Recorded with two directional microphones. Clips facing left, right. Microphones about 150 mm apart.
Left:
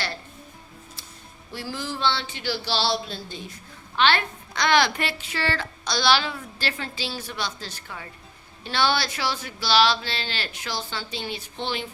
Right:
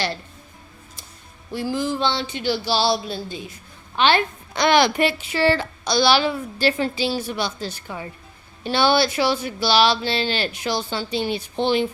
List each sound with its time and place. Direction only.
1.5 s a woman's voice: 15° right (ahead or behind)